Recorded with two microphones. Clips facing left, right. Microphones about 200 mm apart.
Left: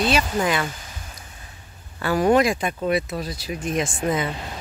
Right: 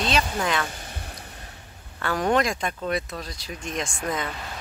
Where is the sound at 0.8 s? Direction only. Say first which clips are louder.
Right 3 dB; 60° right (ahead or behind).